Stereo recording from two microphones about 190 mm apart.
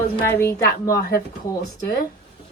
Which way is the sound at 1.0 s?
55° left (ahead or behind).